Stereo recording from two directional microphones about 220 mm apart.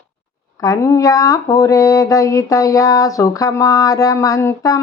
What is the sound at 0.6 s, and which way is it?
Speech, 15° left (ahead or behind).